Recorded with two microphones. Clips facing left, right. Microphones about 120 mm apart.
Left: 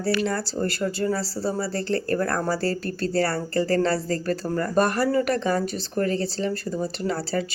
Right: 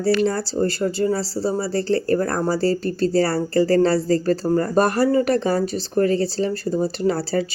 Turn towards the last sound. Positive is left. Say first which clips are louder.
# right 5 dB
turn(degrees=-35)  # may be behind; listen again after turning